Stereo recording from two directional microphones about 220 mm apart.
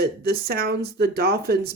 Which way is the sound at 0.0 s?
45° right (ahead or behind).